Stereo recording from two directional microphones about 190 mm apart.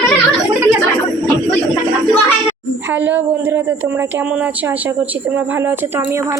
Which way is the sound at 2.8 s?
10° right (ahead or behind).